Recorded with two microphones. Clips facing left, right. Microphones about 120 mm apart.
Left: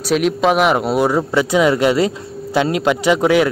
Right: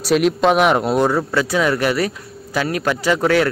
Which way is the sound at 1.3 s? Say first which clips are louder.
Left 4 dB; 20° left (ahead or behind).